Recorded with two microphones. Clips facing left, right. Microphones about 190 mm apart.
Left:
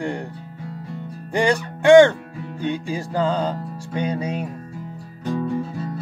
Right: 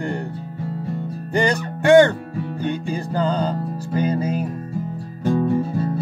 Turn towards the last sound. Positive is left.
turn(degrees=-35)  # may be behind; listen again after turning